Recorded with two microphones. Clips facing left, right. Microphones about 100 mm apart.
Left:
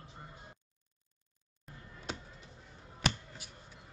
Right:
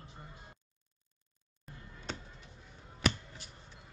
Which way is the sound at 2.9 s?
5° left (ahead or behind).